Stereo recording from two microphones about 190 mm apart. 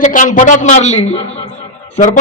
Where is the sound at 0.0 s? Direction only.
40° left (ahead or behind).